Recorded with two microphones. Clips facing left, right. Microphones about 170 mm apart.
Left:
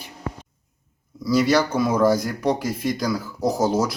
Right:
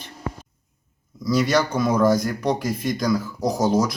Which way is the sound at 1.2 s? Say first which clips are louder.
Left 1 dB; 5° left (ahead or behind).